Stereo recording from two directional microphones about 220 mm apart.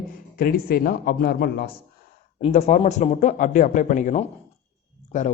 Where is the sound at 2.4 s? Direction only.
30° left (ahead or behind).